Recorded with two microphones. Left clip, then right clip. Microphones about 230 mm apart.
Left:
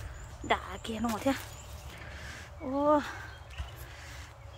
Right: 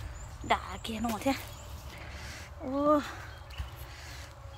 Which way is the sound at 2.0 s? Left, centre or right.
Centre.